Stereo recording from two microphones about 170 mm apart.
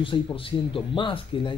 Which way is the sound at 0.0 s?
30° left (ahead or behind).